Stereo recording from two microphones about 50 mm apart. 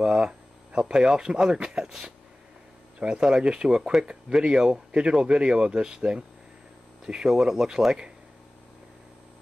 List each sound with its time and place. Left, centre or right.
0.0 s speech: centre